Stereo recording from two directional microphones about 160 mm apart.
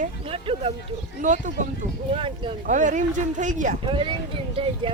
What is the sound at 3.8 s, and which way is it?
Speech, 30° right (ahead or behind).